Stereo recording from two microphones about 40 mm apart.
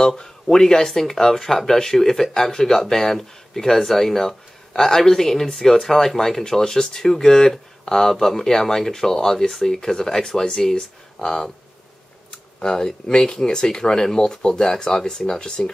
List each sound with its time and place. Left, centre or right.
0.0 s speech: centre